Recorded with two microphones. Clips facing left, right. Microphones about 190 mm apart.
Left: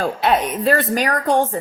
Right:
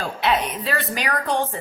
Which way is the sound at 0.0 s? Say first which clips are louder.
Left 4 dB; 45° left (ahead or behind).